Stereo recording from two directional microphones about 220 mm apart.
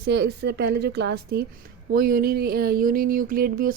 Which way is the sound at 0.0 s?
50° right (ahead or behind).